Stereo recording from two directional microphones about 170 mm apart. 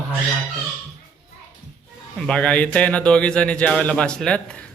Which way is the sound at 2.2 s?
5° left (ahead or behind).